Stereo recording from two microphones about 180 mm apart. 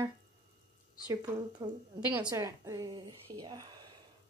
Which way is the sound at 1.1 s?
20° right (ahead or behind).